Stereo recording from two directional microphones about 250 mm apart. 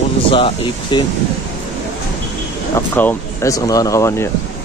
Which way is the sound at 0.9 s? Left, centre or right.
Centre.